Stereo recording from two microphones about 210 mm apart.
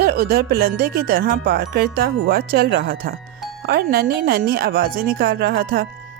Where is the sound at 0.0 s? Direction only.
50° right (ahead or behind).